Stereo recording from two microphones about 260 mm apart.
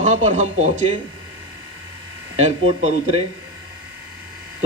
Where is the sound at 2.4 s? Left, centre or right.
Right.